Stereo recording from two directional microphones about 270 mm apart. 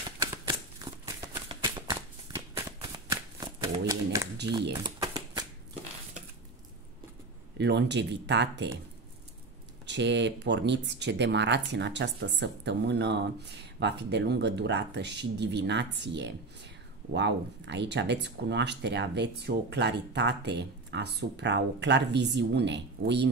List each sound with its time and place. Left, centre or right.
0.2 s shuffling cards: centre
3.3 s a sound: centre
4.8 s shuffling cards: centre
7.5 s speech: right
9.8 s speech: right